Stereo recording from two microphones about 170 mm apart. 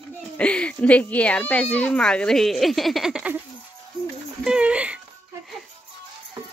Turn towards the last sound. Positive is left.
turn(degrees=-5)  # may be behind; listen again after turning